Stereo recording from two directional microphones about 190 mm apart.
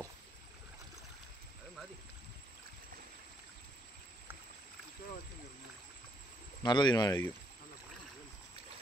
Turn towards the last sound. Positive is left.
turn(degrees=20)  # may be behind; listen again after turning